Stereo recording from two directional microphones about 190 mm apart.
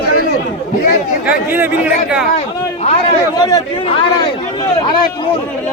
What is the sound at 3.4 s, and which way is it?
Speech, 20° left (ahead or behind).